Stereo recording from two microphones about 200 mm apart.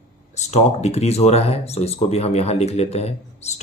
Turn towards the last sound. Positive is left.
turn(degrees=30)  # may be behind; listen again after turning